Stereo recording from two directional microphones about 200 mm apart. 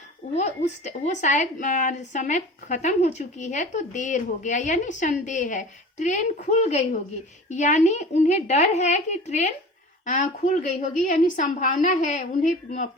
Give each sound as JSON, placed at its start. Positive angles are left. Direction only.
{"t": 0.9, "sound": "speech", "side_deg": 35}